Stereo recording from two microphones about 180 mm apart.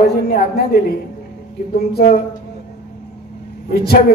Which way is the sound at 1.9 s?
60° left (ahead or behind).